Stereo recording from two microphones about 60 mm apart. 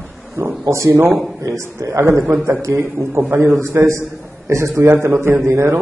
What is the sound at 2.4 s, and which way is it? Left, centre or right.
A man's voice, right.